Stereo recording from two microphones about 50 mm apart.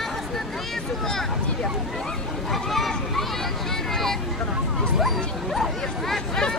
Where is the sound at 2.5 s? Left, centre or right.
Centre.